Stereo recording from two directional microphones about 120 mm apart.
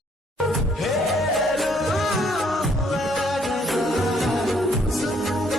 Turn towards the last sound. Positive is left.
turn(degrees=0)  # may be behind; listen again after turning